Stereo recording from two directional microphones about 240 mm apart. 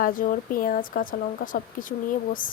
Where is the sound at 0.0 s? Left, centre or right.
Left.